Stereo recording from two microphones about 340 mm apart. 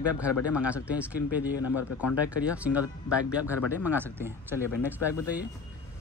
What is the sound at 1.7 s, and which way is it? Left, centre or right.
Speech, left.